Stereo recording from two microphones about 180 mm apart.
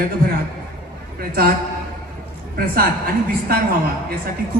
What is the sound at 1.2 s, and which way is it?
Speech, 55° right (ahead or behind).